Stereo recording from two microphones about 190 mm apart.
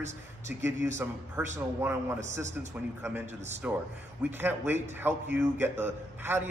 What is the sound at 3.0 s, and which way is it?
Speech, 10° right (ahead or behind).